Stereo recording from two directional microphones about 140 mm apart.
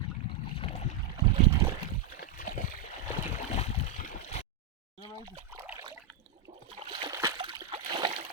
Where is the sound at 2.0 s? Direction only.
75° left (ahead or behind).